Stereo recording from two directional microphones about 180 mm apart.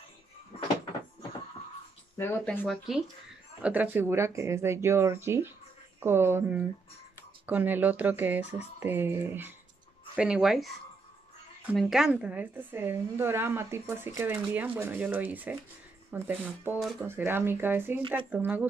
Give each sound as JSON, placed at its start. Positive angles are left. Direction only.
{"t": 0.5, "sound": "cupboard open or close", "side_deg": 35}
{"t": 2.1, "sound": "speech", "side_deg": 10}
{"t": 3.6, "sound": "a woman's voice", "side_deg": -10}
{"t": 11.7, "sound": "a woman's voice", "side_deg": -5}